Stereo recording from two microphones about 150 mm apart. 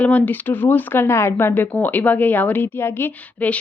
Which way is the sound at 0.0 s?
10° left (ahead or behind).